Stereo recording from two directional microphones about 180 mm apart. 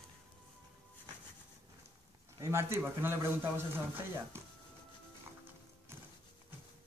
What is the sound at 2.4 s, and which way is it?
A man's voice, 15° right (ahead or behind).